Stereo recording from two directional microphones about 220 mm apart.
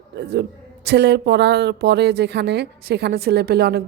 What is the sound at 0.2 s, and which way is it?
A woman's voice, 50° right (ahead or behind).